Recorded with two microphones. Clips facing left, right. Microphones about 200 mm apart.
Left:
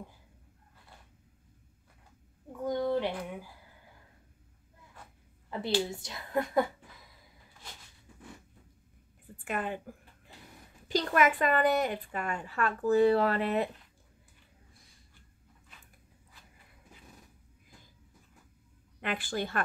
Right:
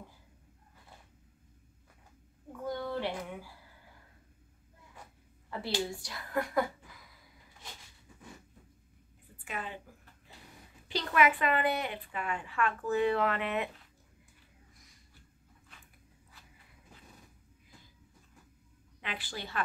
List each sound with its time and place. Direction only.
2.6 s a sound: 20° left (ahead or behind)
5.5 s a woman's voice: 20° left (ahead or behind)
9.4 s a woman's voice: 50° left (ahead or behind)
10.9 s a woman's voice: 45° left (ahead or behind)
18.9 s a woman's voice: 50° left (ahead or behind)